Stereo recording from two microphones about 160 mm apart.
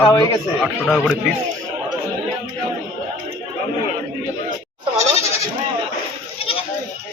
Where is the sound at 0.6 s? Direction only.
Centre (ahead or behind).